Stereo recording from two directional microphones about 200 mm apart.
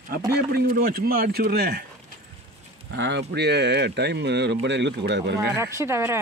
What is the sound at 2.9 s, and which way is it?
Speech, 60° right (ahead or behind).